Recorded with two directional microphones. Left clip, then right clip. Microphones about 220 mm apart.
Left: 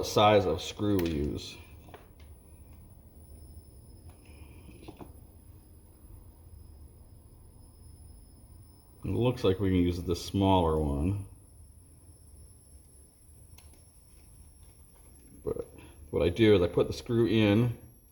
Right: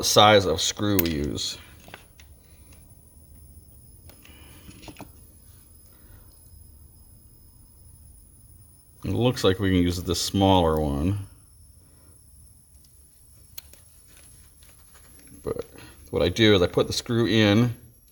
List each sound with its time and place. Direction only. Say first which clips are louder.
0.0 s speech: right 7 dB; 45° right (ahead or behind)
9.0 s speech: right 6 dB; 50° right (ahead or behind)
15.7 s speech: right 4 dB; 50° right (ahead or behind)